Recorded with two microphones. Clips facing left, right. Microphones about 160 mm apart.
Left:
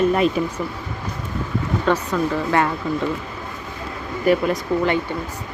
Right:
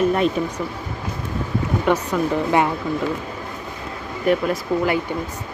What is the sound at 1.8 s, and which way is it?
Speech, 15° right (ahead or behind).